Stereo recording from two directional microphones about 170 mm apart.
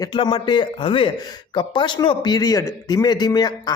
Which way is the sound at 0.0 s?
25° left (ahead or behind).